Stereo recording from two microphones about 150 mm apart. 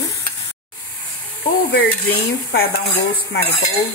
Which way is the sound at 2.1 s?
90° left.